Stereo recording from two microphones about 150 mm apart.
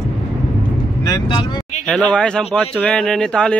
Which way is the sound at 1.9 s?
5° left (ahead or behind).